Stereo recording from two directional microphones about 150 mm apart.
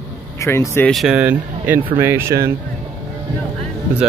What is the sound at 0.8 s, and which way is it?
Speech, centre (ahead or behind).